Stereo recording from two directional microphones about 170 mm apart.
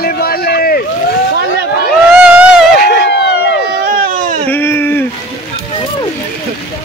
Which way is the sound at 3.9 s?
55° right (ahead or behind).